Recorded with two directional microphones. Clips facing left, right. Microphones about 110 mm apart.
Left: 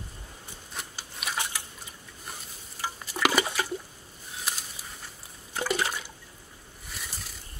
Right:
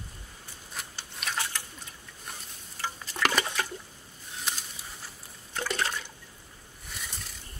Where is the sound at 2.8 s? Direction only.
10° left (ahead or behind).